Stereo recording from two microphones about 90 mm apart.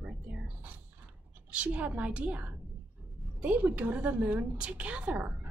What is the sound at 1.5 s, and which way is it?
A woman's voice, 15° right (ahead or behind).